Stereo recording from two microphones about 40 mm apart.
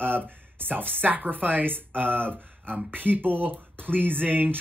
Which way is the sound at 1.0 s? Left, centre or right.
Right.